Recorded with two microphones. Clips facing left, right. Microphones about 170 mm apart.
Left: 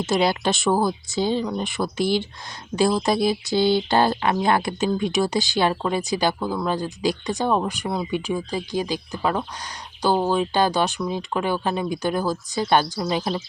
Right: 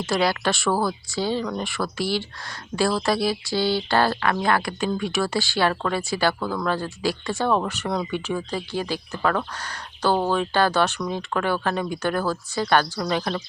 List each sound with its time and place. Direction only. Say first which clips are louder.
0.0 s speech: left 2 dB; 20° left (ahead or behind)
13.1 s speech: left 1 dB; centre (ahead or behind)